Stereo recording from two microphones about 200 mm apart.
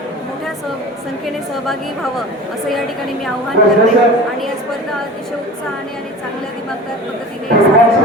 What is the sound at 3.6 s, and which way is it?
Speech, 50° left (ahead or behind).